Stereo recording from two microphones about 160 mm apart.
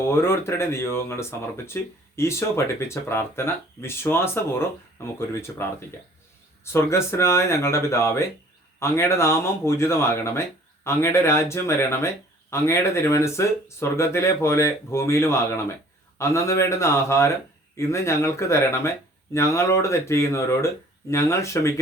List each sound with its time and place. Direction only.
0.0 s speech: 15° left (ahead or behind)
5.3 s speech: 15° left (ahead or behind)
6.7 s speech: 15° left (ahead or behind)